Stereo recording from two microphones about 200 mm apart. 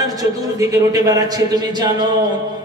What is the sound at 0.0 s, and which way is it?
A man's voice, 15° right (ahead or behind).